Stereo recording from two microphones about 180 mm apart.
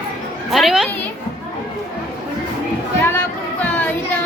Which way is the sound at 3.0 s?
10° left (ahead or behind).